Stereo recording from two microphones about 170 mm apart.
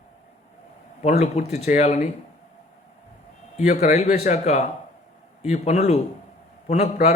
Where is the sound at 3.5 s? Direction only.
45° left (ahead or behind).